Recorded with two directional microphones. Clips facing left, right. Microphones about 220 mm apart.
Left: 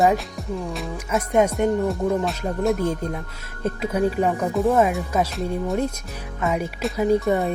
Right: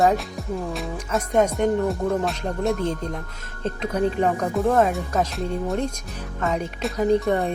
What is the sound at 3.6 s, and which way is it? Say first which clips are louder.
Speech: left 1 dB; 10° left (ahead or behind).